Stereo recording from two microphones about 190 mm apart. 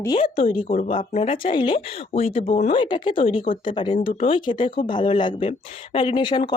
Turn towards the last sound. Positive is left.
turn(degrees=25)  # may be behind; listen again after turning